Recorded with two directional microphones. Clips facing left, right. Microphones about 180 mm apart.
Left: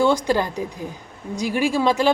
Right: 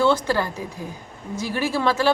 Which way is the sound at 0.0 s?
15° left (ahead or behind).